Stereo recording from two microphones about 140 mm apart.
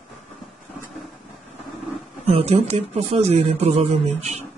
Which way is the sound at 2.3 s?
45° right (ahead or behind).